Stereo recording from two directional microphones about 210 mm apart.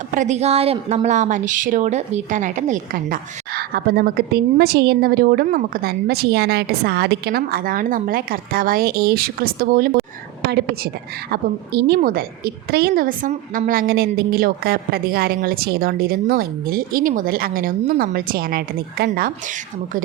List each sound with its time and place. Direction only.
0.1 s a woman's voice: 35° right (ahead or behind)
11.3 s a woman's voice: 50° right (ahead or behind)